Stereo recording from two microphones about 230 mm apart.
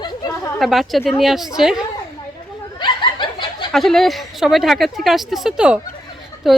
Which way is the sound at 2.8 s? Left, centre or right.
Centre.